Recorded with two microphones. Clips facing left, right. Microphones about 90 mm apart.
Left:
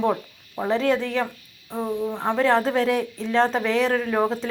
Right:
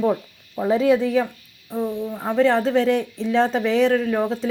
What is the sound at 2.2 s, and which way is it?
Speech, centre (ahead or behind).